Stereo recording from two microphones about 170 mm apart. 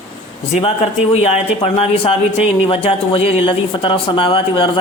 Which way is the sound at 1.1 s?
35° left (ahead or behind).